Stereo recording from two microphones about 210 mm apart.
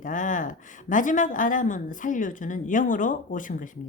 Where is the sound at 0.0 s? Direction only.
40° left (ahead or behind).